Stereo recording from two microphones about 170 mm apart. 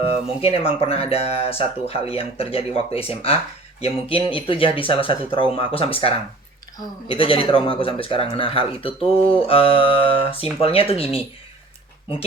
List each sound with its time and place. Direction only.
0.0 s a man's voice: 35° left (ahead or behind)